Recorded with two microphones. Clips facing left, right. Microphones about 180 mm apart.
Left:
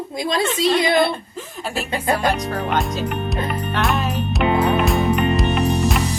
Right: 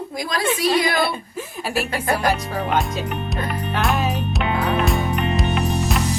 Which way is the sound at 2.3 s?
Centre (ahead or behind).